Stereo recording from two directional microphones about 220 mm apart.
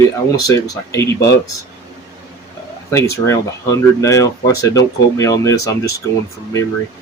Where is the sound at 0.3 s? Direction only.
15° left (ahead or behind).